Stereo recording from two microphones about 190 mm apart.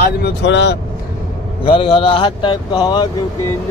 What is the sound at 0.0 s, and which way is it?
Speech, 60° left (ahead or behind).